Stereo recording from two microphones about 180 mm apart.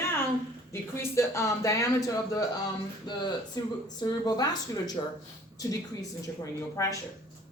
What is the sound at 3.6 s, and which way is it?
A woman's voice, 20° left (ahead or behind).